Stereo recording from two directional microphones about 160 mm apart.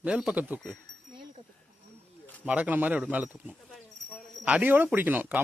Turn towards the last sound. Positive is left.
turn(degrees=-10)  # may be behind; listen again after turning